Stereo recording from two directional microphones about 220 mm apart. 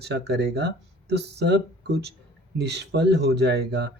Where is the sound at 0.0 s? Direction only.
50° right (ahead or behind).